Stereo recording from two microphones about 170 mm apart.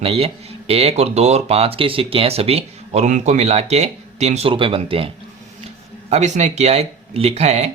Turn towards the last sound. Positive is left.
turn(degrees=-40)  # may be behind; listen again after turning